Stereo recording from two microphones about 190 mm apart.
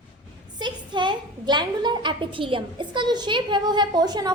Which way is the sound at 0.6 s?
25° right (ahead or behind).